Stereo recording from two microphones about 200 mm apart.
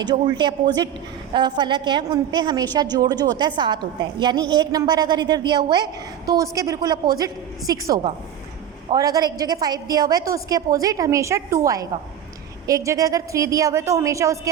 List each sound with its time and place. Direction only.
0.0 s a woman's voice: 20° right (ahead or behind)